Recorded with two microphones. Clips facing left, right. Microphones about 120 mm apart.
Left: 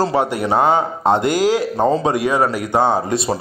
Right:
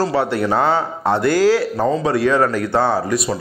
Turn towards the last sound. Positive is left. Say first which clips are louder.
# left 1 dB
turn(degrees=25)  # may be behind; listen again after turning